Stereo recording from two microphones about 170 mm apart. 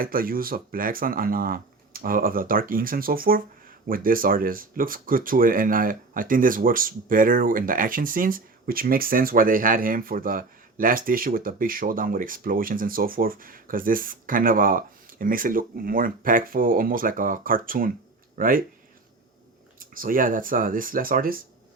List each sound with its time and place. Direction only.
0.0 s speech: 60° right (ahead or behind)
19.8 s speech: 55° right (ahead or behind)